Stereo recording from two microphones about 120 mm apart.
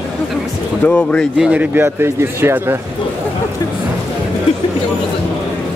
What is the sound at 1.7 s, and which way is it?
Speech, 20° right (ahead or behind).